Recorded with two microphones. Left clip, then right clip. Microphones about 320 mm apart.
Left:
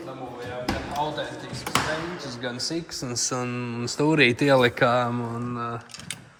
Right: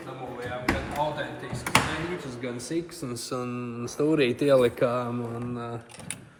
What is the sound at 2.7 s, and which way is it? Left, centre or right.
Speech, left.